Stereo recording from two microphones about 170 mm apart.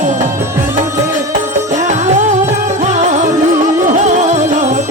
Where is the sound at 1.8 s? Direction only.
45° right (ahead or behind).